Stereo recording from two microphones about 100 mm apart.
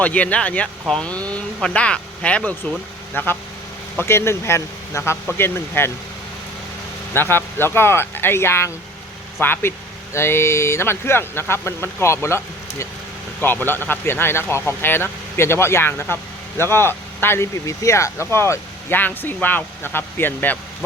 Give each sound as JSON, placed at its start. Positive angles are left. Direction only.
{"t": 0.0, "sound": "speech", "side_deg": 15}
{"t": 7.1, "sound": "speech", "side_deg": 20}
{"t": 13.4, "sound": "speech", "side_deg": 20}